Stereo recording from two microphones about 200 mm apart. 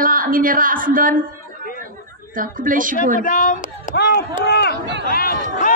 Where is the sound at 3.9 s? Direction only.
55° left (ahead or behind).